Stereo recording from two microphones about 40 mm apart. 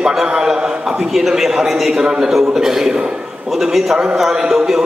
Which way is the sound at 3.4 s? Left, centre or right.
Centre.